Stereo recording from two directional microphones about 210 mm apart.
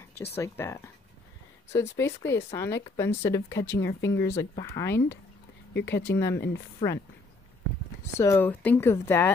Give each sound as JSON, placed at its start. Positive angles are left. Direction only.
{"t": 0.4, "sound": "speech", "side_deg": 15}
{"t": 5.7, "sound": "speech", "side_deg": 55}
{"t": 6.1, "sound": "speech", "side_deg": 15}
{"t": 6.8, "sound": "speech", "side_deg": 25}
{"t": 8.2, "sound": "speech", "side_deg": 10}